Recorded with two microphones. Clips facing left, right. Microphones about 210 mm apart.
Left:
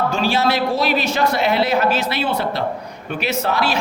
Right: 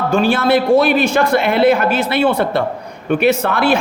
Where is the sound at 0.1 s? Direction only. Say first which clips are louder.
Right 5 dB; 55° right (ahead or behind).